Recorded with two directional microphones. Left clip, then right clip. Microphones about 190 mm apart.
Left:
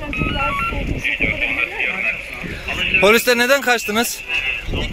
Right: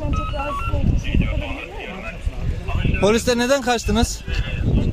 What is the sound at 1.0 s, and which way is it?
Speech, 20° right (ahead or behind).